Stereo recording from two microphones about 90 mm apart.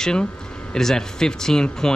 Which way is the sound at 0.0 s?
10° left (ahead or behind).